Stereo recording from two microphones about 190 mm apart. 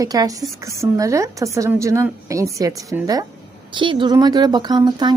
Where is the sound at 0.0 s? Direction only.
20° right (ahead or behind).